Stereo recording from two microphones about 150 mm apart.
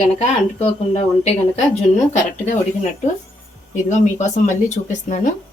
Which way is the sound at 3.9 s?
55° left (ahead or behind).